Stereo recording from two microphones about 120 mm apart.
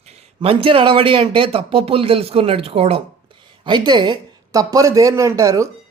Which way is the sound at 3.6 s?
40° right (ahead or behind).